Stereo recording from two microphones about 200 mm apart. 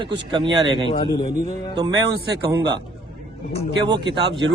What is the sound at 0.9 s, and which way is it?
Speech, 25° left (ahead or behind).